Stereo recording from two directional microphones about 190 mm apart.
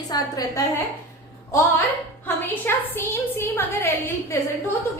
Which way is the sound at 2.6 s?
10° left (ahead or behind).